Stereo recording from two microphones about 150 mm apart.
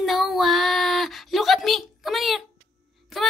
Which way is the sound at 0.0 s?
Centre (ahead or behind).